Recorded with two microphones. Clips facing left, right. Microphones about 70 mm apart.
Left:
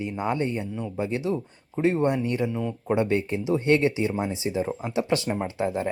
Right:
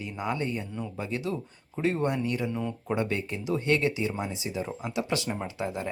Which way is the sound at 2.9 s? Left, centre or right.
Left.